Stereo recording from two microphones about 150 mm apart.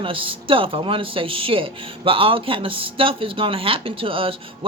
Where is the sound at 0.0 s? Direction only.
35° right (ahead or behind).